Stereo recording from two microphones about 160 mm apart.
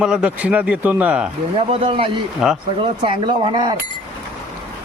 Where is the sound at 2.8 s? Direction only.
30° right (ahead or behind).